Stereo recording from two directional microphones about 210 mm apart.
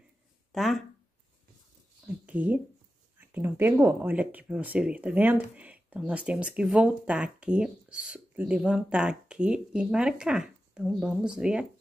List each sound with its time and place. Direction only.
0.5 s speech: centre (ahead or behind)
2.2 s speech: 5° right (ahead or behind)